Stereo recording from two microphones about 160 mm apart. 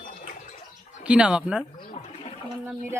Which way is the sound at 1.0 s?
5° right (ahead or behind).